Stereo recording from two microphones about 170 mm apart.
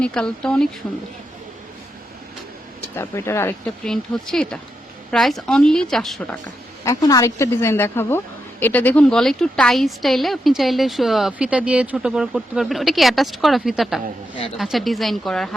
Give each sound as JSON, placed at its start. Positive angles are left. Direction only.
{"t": 0.0, "sound": "a woman's voice", "side_deg": 5}
{"t": 2.9, "sound": "speech", "side_deg": 15}
{"t": 3.8, "sound": "a woman's voice", "side_deg": 0}
{"t": 6.8, "sound": "a woman's voice", "side_deg": 20}